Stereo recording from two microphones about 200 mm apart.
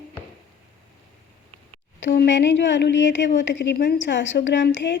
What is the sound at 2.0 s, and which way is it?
Speech, 60° left (ahead or behind).